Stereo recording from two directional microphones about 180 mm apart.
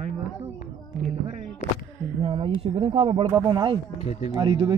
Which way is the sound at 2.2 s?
30° right (ahead or behind).